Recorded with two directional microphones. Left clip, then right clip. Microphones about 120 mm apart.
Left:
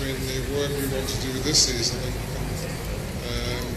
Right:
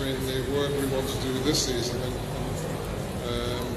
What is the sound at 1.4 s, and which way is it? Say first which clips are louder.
Speech: left 6 dB; 25° right (ahead or behind).